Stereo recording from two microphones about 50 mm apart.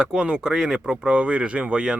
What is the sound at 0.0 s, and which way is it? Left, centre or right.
Speech, centre.